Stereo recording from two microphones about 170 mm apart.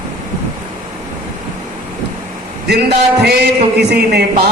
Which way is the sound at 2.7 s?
75° right (ahead or behind).